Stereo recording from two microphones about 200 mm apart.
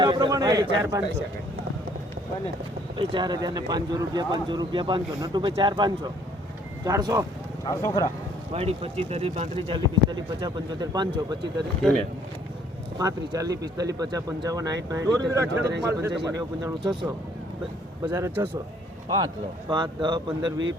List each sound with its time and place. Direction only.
0.0 s a man's voice: 20° right (ahead or behind)
3.0 s speech: 25° right (ahead or behind)
7.6 s speech: 15° left (ahead or behind)
8.5 s speech: 30° right (ahead or behind)
13.0 s speech: 15° right (ahead or behind)
18.0 s speech: 15° right (ahead or behind)